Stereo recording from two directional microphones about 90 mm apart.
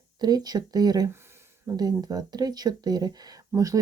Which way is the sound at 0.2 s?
50° right (ahead or behind).